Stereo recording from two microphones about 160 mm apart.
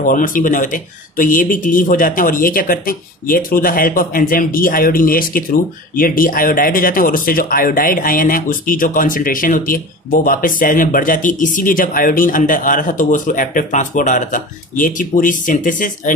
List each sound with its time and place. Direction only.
0.0 s speech: 55° left (ahead or behind)